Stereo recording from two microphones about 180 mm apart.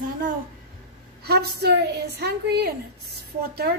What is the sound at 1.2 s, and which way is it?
A woman's voice, 65° right (ahead or behind).